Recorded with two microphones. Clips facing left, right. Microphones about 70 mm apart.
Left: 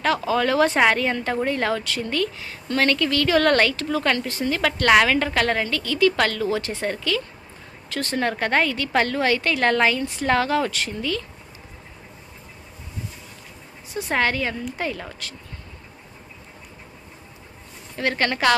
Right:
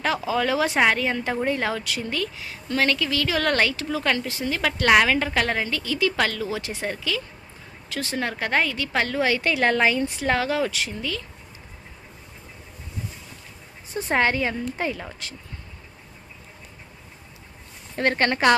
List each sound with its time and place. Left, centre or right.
0.0 s speech: centre
6.1 s speech: centre
13.9 s a woman's voice: right; by 15.1 s centre
17.9 s a woman's voice: right